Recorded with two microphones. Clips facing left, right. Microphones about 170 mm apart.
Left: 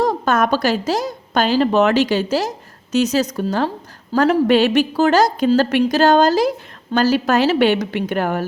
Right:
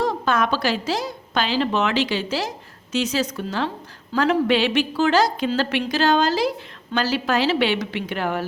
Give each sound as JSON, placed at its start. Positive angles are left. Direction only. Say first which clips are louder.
{"t": 0.0, "sound": "a woman's voice", "louder": "left 4 dB", "side_deg": 45}